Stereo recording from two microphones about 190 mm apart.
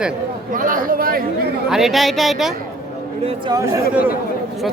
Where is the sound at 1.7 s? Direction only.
Centre (ahead or behind).